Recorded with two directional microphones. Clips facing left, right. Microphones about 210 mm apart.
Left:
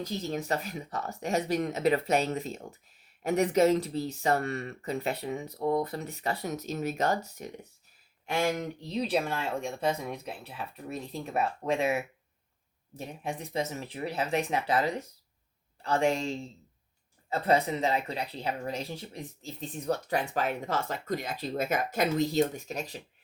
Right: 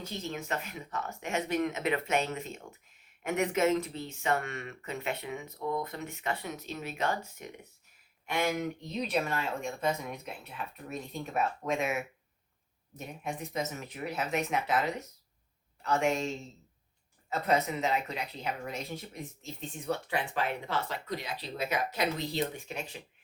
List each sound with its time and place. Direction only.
0.0 s speech: 35° left (ahead or behind)